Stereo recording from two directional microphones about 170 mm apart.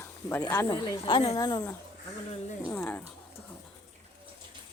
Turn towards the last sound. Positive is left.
turn(degrees=10)  # may be behind; listen again after turning